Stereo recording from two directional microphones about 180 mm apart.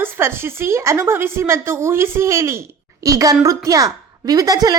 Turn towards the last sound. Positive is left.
turn(degrees=-20)  # may be behind; listen again after turning